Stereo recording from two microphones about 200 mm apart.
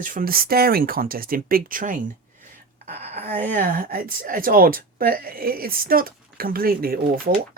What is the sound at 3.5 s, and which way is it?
Speech, 45° right (ahead or behind).